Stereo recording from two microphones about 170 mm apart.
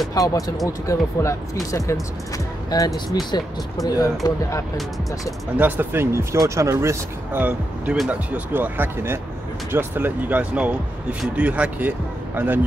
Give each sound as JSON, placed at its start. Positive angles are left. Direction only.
{"t": 0.1, "sound": "speech", "side_deg": 20}
{"t": 5.6, "sound": "speech", "side_deg": -10}